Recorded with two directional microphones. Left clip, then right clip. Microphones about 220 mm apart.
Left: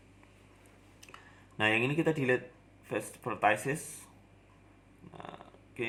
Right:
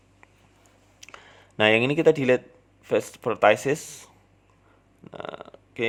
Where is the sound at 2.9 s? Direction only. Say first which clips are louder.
Right 12 dB; 45° right (ahead or behind).